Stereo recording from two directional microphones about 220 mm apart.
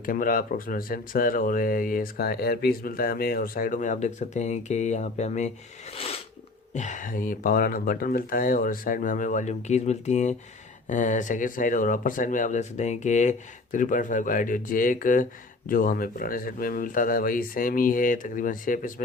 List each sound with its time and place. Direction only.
0.0 s speech: 40° left (ahead or behind)
6.7 s speech: 35° left (ahead or behind)